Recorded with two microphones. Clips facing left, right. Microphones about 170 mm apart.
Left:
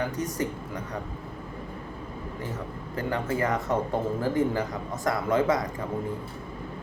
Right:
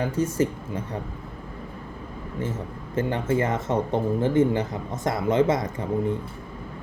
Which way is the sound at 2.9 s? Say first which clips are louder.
Right 5 dB; 25° right (ahead or behind).